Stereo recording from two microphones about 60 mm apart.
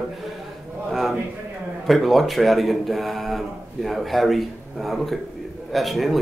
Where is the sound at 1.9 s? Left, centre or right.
Centre.